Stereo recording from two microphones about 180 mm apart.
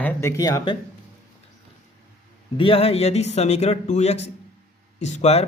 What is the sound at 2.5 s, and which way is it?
Speech, 30° left (ahead or behind).